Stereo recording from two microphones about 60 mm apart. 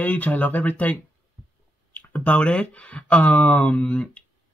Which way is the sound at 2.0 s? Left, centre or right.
Left.